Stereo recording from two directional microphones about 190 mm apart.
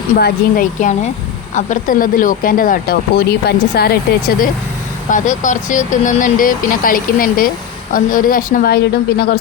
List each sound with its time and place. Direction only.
0.2 s speech: 50° left (ahead or behind)
5.0 s speech: 40° left (ahead or behind)